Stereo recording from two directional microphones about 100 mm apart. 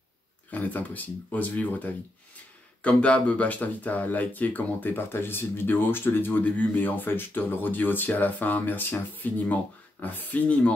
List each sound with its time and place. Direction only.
0.5 s speech: 15° left (ahead or behind)